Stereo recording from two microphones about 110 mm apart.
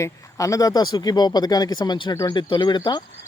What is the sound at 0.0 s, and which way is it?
Speech, 30° left (ahead or behind).